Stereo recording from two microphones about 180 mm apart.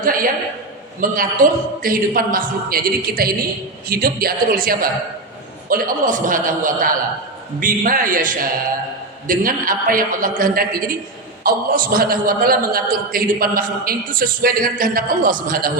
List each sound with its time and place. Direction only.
0.0 s a man's voice: 50° right (ahead or behind)